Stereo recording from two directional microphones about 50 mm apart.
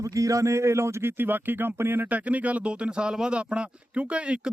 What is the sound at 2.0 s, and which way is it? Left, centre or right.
Speech, right.